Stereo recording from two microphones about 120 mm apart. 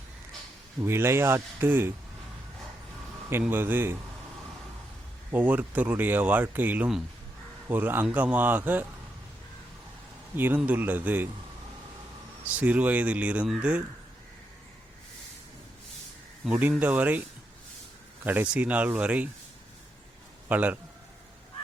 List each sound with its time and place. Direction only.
0.8 s speech: 20° right (ahead or behind)
3.5 s speech: 15° right (ahead or behind)
5.3 s speech: 15° right (ahead or behind)
10.3 s speech: 15° right (ahead or behind)
12.5 s speech: 10° right (ahead or behind)
16.5 s speech: 15° right (ahead or behind)
20.5 s speech: 15° right (ahead or behind)